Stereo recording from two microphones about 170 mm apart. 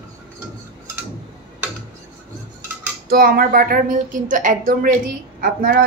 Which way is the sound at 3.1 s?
60° right (ahead or behind).